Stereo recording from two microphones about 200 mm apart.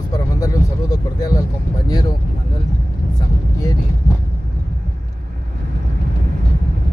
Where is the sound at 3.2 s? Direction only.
15° left (ahead or behind).